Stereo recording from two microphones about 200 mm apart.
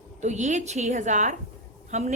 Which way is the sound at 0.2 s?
35° right (ahead or behind).